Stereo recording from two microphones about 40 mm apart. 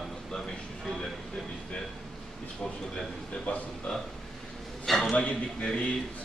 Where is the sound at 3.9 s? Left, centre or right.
Left.